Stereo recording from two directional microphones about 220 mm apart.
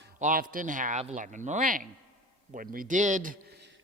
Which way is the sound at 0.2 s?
40° right (ahead or behind).